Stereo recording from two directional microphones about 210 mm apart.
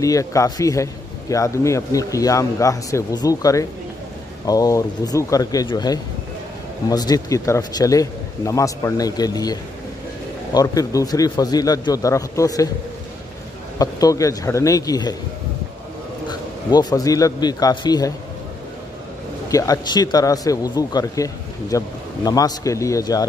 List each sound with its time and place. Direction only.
0.0 s speech: 15° left (ahead or behind)
13.7 s speech: 15° left (ahead or behind)
16.3 s a man's voice: 15° left (ahead or behind)
19.5 s speech: 15° left (ahead or behind)